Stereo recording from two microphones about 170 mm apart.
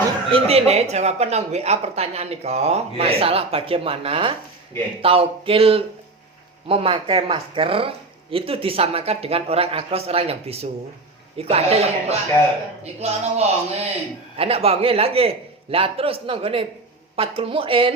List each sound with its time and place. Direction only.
0.3 s speech: 35° right (ahead or behind)